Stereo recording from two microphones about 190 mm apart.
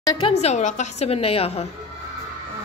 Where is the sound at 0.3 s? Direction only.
35° left (ahead or behind).